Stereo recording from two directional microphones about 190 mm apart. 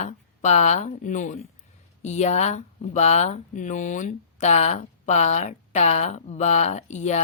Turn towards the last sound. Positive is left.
turn(degrees=35)  # may be behind; listen again after turning